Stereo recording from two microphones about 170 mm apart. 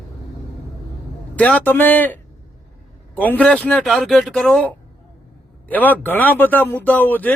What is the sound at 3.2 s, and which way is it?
Speech, 10° left (ahead or behind).